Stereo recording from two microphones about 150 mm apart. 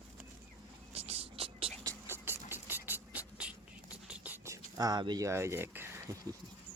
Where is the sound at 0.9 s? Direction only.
45° right (ahead or behind).